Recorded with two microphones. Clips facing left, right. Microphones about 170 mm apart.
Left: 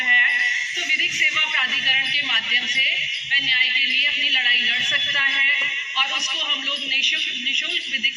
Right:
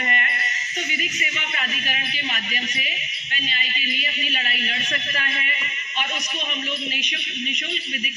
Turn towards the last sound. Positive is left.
turn(degrees=-45)  # may be behind; listen again after turning